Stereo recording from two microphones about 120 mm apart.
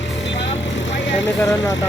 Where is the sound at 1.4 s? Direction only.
30° left (ahead or behind).